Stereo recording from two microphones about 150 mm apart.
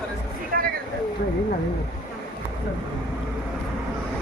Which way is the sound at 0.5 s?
80° right.